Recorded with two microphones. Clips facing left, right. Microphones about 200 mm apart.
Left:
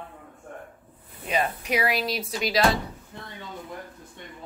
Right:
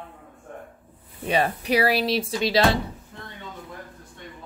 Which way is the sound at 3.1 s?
5° left (ahead or behind).